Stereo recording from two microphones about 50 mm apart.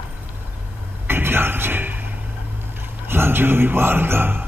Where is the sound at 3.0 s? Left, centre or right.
Right.